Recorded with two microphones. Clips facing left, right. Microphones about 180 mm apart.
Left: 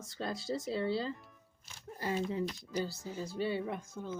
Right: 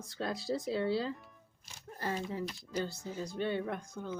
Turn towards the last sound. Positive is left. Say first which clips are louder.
# right 1 dB
turn(degrees=0)  # may be behind; listen again after turning